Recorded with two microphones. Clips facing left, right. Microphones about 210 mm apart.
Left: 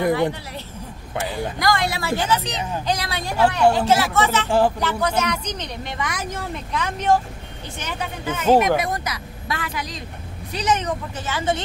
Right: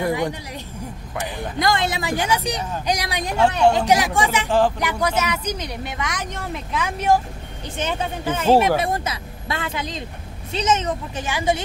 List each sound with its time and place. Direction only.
0.1 s speech: 15° right (ahead or behind)
1.6 s speech: 20° right (ahead or behind)
4.5 s speech: 10° left (ahead or behind)
5.0 s speech: 5° right (ahead or behind)
7.7 s speech: 25° right (ahead or behind)
8.7 s a sound: 25° right (ahead or behind)
10.5 s speech: 20° right (ahead or behind)